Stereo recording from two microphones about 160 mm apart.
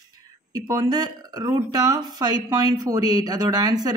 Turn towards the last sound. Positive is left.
turn(degrees=-25)  # may be behind; listen again after turning